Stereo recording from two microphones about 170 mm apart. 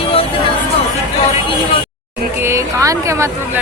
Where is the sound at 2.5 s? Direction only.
15° right (ahead or behind).